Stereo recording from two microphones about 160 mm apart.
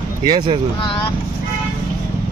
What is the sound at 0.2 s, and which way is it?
Speech, 30° right (ahead or behind).